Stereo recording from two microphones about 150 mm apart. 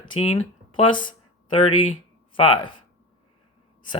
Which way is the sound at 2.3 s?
35° left (ahead or behind).